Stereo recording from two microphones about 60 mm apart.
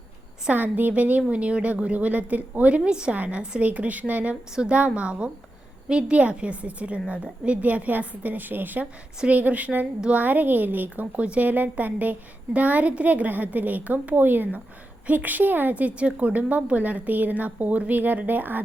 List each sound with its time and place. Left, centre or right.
0.5 s a woman's voice: right